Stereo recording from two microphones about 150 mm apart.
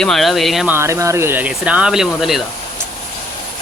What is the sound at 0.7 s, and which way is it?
Speech, 15° right (ahead or behind).